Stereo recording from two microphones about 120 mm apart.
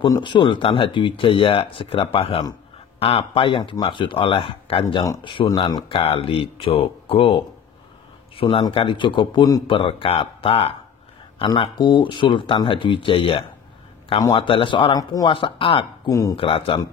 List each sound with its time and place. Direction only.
0.0 s speech: 40° left (ahead or behind)
5.7 s speech: 35° left (ahead or behind)
5.9 s speech: 50° left (ahead or behind)
15.3 s speech: 45° left (ahead or behind)
16.1 s speech: 30° left (ahead or behind)
16.3 s speech: 50° left (ahead or behind)